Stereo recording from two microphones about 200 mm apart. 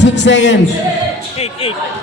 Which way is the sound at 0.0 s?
60° left (ahead or behind).